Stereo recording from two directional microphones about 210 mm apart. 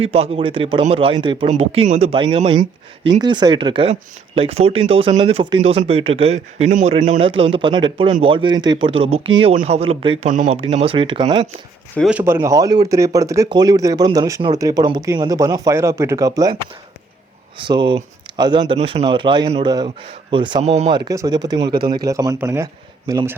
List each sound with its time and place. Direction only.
0.0 s speech: 30° right (ahead or behind)
10.2 s speech: 35° right (ahead or behind); by 11.4 s 20° right (ahead or behind)
11.9 s speech: 5° right (ahead or behind)
17.6 s speech: 25° right (ahead or behind)
21.0 s speech: 20° right (ahead or behind)